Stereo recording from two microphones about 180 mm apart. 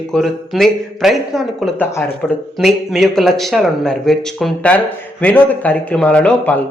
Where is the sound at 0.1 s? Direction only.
Centre (ahead or behind).